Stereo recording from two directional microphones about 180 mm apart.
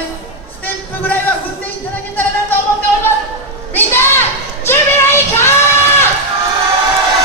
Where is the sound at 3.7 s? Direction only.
10° left (ahead or behind).